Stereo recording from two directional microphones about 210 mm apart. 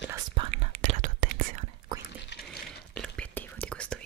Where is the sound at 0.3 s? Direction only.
25° right (ahead or behind).